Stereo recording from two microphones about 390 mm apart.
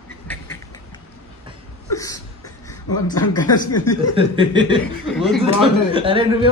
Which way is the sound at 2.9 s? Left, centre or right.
Centre.